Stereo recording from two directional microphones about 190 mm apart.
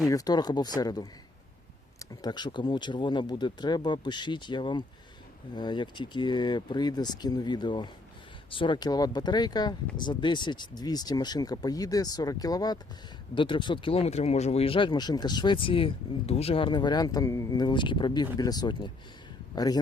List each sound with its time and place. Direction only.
0.1 s speech: 20° left (ahead or behind)